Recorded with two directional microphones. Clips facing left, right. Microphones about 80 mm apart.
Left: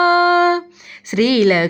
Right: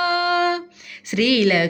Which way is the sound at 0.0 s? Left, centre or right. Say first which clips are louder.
Left 7 dB; left.